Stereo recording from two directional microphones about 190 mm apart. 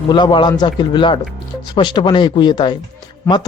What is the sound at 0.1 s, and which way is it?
Speech, 25° left (ahead or behind).